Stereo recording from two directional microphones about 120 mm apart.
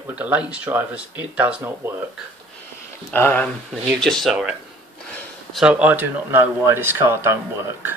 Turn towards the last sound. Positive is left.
turn(degrees=-20)  # may be behind; listen again after turning